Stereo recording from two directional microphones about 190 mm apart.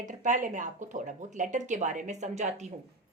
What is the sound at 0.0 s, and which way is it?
Speech, 40° right (ahead or behind).